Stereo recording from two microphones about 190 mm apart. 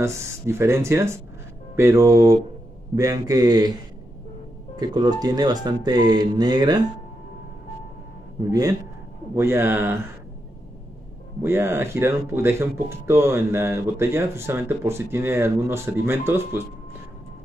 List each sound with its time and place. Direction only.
0.0 s speech: 15° right (ahead or behind)
8.5 s speech: 20° right (ahead or behind)
11.4 s speech: 10° right (ahead or behind)